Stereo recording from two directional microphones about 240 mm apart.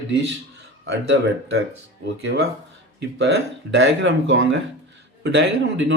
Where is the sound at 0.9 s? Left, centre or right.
Right.